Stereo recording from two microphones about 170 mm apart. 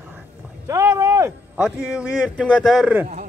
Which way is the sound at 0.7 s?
20° right (ahead or behind).